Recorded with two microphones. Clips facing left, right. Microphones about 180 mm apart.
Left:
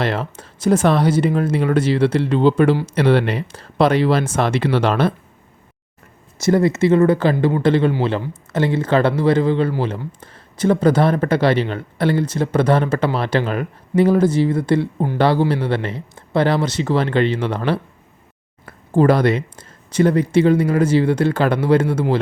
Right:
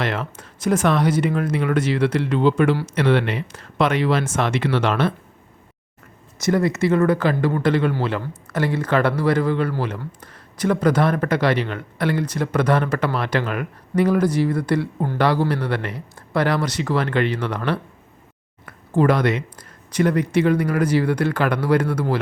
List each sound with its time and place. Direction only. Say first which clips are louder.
0.0 s speech: left 3 dB; 30° left (ahead or behind)
6.4 s speech: left 4 dB; 30° left (ahead or behind)
18.6 s speech: left 3 dB; 30° left (ahead or behind)